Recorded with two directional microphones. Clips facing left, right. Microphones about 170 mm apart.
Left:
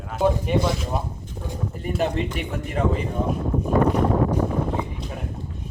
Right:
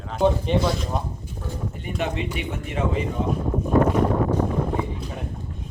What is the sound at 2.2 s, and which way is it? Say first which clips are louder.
Speech: left 2 dB; 40° left (ahead or behind).